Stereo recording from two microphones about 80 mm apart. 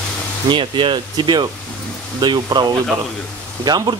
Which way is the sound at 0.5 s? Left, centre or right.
Right.